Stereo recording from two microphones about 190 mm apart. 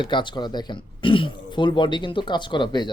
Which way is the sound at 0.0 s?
25° left (ahead or behind).